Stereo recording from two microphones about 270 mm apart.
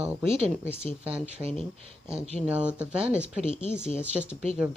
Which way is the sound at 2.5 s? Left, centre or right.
Centre.